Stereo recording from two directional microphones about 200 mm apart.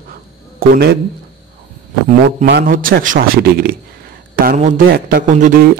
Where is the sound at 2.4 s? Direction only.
50° right (ahead or behind).